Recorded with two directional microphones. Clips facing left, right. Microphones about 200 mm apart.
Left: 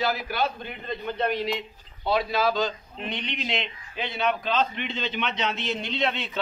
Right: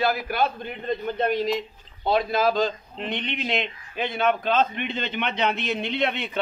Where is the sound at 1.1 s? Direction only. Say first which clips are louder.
Right 2 dB; 45° right (ahead or behind).